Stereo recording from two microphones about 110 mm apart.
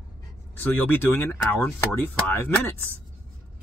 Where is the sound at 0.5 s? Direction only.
20° left (ahead or behind).